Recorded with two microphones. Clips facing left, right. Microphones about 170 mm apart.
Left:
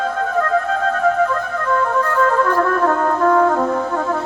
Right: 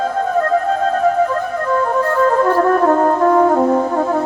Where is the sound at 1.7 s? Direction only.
30° right (ahead or behind).